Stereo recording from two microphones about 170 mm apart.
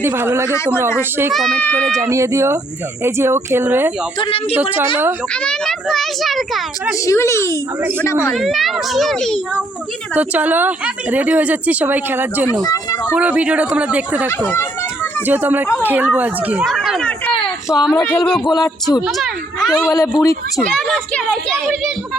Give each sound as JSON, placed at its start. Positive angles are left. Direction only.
{"t": 0.0, "sound": "a woman's voice", "side_deg": -15}
{"t": 1.3, "sound": "a child's voice", "side_deg": 0}
{"t": 2.0, "sound": "a woman's voice", "side_deg": -20}
{"t": 4.2, "sound": "speech", "side_deg": 35}
{"t": 4.5, "sound": "a woman's voice", "side_deg": -10}
{"t": 5.3, "sound": "a child's voice", "side_deg": 5}
{"t": 7.0, "sound": "a child's voice", "side_deg": 15}
{"t": 8.3, "sound": "a child's voice", "side_deg": 0}
{"t": 10.2, "sound": "a woman's voice", "side_deg": -10}
{"t": 12.6, "sound": "speech", "side_deg": 20}
{"t": 13.1, "sound": "a woman's voice", "side_deg": -10}
{"t": 15.3, "sound": "a woman's voice", "side_deg": -10}
{"t": 19.9, "sound": "speech", "side_deg": 20}
{"t": 20.6, "sound": "a child's voice", "side_deg": 5}